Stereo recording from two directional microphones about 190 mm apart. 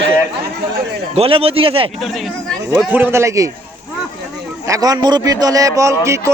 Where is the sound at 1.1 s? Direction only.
30° right (ahead or behind).